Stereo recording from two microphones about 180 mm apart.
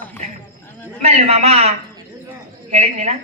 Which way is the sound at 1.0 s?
35° right (ahead or behind).